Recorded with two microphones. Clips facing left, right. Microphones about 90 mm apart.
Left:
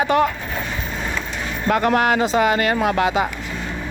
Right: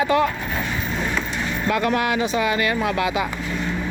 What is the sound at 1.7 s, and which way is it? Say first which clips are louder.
Speech: left 4 dB; 40° left (ahead or behind).